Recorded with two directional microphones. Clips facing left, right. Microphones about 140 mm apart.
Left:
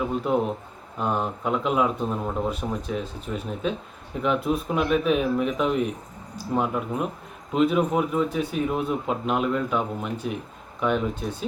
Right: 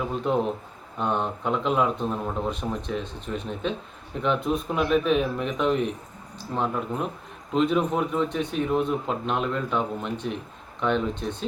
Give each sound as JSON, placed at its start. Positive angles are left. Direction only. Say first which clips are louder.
{"t": 0.3, "sound": "speech", "louder": "right 2 dB", "side_deg": 5}